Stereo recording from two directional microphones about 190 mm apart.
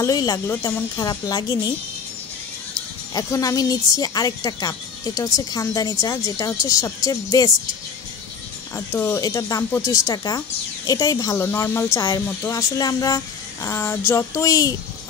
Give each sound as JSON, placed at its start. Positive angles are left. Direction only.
{"t": 0.0, "sound": "speech", "side_deg": 20}
{"t": 3.2, "sound": "speech", "side_deg": 20}
{"t": 8.7, "sound": "speech", "side_deg": 15}